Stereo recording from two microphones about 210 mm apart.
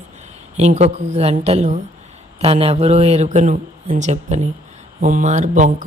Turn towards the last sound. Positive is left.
turn(degrees=-40)  # may be behind; listen again after turning